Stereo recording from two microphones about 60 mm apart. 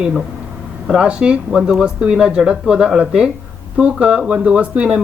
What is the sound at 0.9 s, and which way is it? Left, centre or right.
Speech, centre.